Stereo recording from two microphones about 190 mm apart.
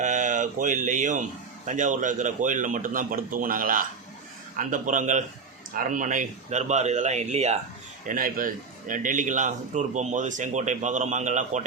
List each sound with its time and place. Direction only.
0.0 s a man's voice: 40° right (ahead or behind)
8.0 s a man's voice: 45° right (ahead or behind)